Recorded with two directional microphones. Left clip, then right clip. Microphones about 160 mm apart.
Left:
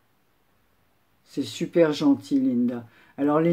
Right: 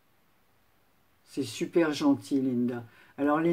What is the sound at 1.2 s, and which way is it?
Speech, 25° left (ahead or behind).